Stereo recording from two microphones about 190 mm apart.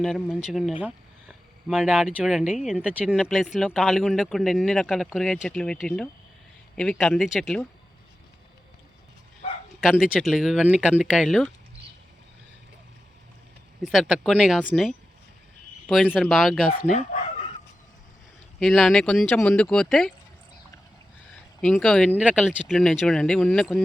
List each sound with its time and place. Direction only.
0.0 s speech: centre (ahead or behind)
9.8 s speech: centre (ahead or behind)
13.8 s speech: centre (ahead or behind)
16.7 s speech: 40° left (ahead or behind)
18.6 s speech: centre (ahead or behind)
21.6 s speech: 5° left (ahead or behind)